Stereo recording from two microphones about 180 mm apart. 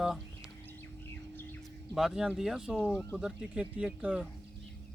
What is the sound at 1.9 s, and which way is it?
Speech, 5° right (ahead or behind).